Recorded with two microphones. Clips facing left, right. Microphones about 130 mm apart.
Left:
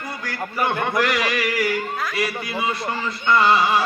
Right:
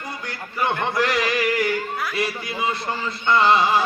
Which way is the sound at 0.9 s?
25° right (ahead or behind).